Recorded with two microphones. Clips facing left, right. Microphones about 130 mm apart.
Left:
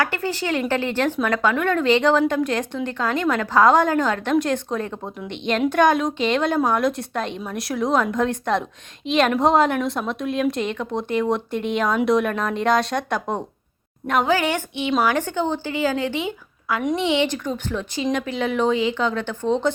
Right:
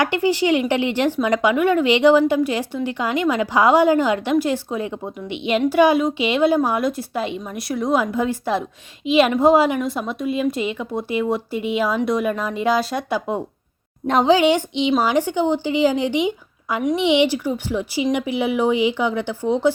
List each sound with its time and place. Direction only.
0.0 s a woman's voice: 15° right (ahead or behind)
14.1 s speech: 30° right (ahead or behind)
14.3 s a woman's voice: 15° right (ahead or behind)